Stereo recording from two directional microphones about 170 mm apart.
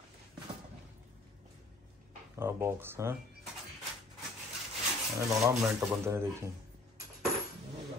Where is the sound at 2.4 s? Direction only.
15° right (ahead or behind).